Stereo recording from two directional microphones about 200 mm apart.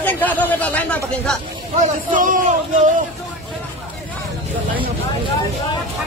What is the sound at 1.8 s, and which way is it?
Speech, 40° right (ahead or behind).